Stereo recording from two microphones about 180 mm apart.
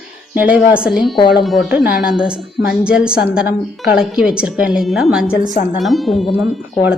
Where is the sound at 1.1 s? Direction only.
25° left (ahead or behind).